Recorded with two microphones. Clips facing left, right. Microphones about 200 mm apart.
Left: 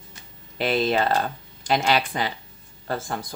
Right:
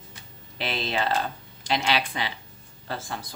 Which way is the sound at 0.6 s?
45° left (ahead or behind).